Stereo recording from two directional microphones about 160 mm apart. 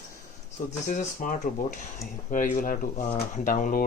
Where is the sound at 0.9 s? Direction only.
55° left (ahead or behind).